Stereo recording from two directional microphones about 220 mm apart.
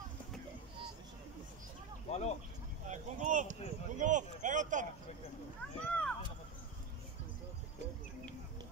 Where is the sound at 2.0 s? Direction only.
30° left (ahead or behind).